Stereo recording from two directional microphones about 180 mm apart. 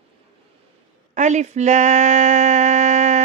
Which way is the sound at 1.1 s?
40° right (ahead or behind).